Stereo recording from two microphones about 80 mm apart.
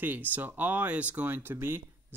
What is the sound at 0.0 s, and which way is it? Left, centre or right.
Speech, right.